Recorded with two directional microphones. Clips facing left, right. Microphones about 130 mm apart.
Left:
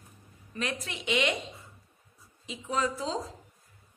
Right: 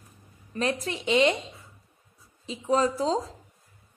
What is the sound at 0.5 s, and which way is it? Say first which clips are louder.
Speech: right 7 dB; 35° right (ahead or behind).